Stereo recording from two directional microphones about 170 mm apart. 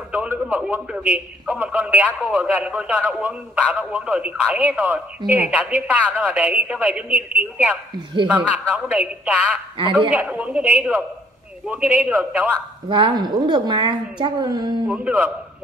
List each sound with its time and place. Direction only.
0.1 s a man's voice: 10° right (ahead or behind)
8.3 s a man's voice: 10° right (ahead or behind)
12.8 s a woman's voice: 30° right (ahead or behind)
14.9 s a man's voice: 10° right (ahead or behind)